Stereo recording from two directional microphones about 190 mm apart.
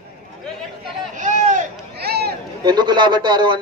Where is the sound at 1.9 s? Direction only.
55° right (ahead or behind).